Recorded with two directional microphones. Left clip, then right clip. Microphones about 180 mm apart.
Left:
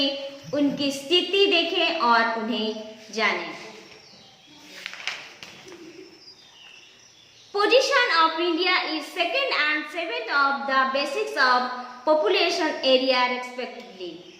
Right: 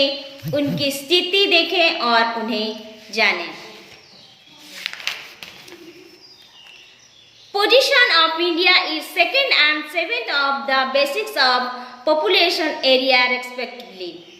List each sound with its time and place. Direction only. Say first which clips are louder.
0.5 s a woman's voice: right 4 dB; 5° right (ahead or behind)
4.9 s a sound: right 8 dB; 40° right (ahead or behind)
7.5 s a woman's voice: right 5 dB; 5° right (ahead or behind)